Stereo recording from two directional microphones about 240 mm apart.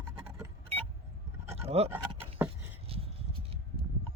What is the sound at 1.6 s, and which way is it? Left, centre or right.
Speech, right.